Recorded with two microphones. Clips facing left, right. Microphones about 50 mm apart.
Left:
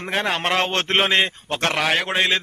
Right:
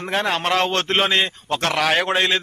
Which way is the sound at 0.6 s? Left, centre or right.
Left.